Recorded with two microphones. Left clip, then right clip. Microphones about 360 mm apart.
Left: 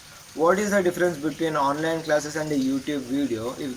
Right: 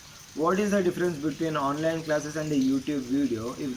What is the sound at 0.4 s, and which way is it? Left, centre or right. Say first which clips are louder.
A man's voice: left 4 dB; left.